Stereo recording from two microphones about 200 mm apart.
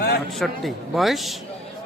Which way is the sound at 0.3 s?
Centre (ahead or behind).